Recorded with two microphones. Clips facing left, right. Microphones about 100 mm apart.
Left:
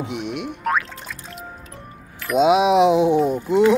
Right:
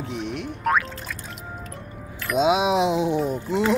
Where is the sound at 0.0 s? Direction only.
70° left (ahead or behind).